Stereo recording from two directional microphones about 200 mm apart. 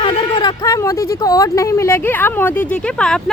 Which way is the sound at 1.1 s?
15° left (ahead or behind).